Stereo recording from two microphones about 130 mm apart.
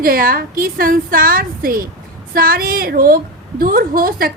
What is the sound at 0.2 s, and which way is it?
A woman's voice, 90° right.